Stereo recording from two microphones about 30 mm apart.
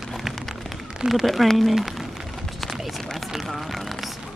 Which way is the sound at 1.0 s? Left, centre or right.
Right.